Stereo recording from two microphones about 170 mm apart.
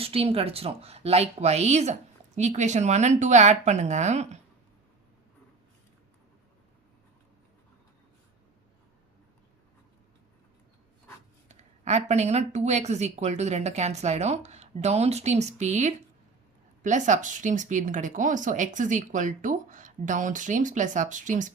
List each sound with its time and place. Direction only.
0.0 s speech: 35° right (ahead or behind)
11.4 s speech: 40° right (ahead or behind)